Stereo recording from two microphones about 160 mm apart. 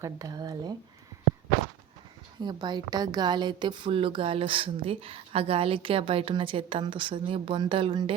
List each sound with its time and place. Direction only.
0.0 s speech: 20° right (ahead or behind)
2.4 s a woman's voice: 25° right (ahead or behind)